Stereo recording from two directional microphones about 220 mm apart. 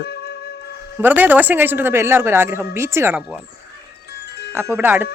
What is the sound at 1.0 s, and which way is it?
Speech, 10° right (ahead or behind).